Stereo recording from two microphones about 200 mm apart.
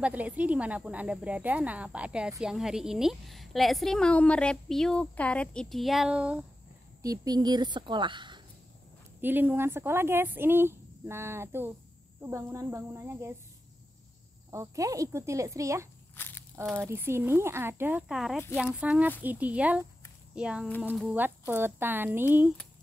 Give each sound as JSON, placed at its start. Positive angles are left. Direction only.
{"t": 0.0, "sound": "a woman's voice", "side_deg": -5}
{"t": 7.0, "sound": "a woman's voice", "side_deg": -20}
{"t": 9.2, "sound": "speech", "side_deg": -10}
{"t": 14.5, "sound": "speech", "side_deg": -15}
{"t": 16.2, "sound": "a sound", "side_deg": 10}
{"t": 16.7, "sound": "a woman's voice", "side_deg": -10}